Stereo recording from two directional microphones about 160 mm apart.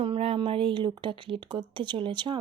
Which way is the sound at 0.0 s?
35° right (ahead or behind).